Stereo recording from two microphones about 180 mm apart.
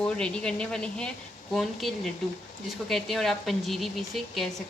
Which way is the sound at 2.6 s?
Centre (ahead or behind).